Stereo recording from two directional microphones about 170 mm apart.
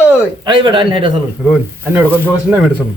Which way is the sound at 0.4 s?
30° right (ahead or behind).